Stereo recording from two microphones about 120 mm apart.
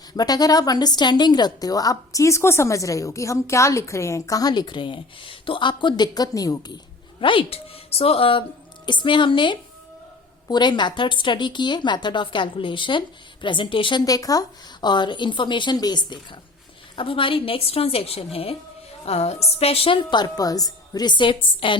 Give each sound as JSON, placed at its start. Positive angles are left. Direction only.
{"t": 0.1, "sound": "a woman's voice", "side_deg": 35}
{"t": 7.2, "sound": "a woman's voice", "side_deg": 45}
{"t": 14.0, "sound": "a woman's voice", "side_deg": 30}